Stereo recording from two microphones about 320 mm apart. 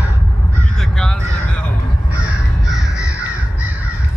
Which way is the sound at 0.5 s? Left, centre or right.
Centre.